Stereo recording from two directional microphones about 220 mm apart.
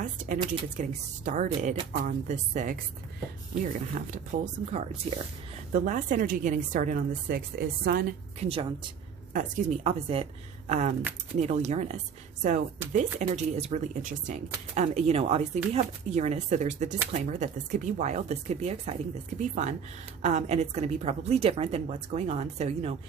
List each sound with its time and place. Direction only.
0.3 s a woman's voice: 20° right (ahead or behind)
0.8 s speech: 35° right (ahead or behind)
1.5 s a woman's voice: 25° right (ahead or behind)
1.9 s a woman's voice: 35° right (ahead or behind)
8.4 s a woman's voice: 25° right (ahead or behind)